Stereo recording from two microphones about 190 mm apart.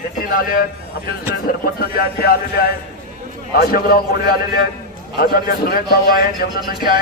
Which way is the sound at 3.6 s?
50° left (ahead or behind).